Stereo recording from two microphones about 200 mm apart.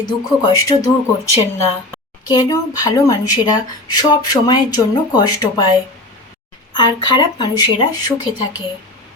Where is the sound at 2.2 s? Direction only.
20° left (ahead or behind).